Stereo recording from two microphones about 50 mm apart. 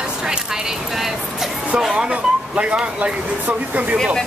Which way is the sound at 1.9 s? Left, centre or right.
Right.